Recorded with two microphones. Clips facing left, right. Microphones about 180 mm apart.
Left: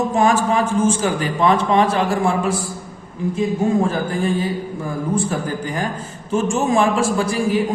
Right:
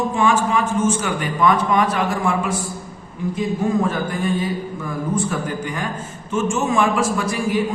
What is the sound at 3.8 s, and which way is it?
Mantra, 30° left (ahead or behind).